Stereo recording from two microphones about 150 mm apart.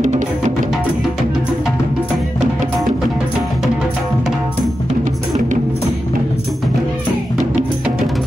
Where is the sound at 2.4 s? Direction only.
50° right (ahead or behind).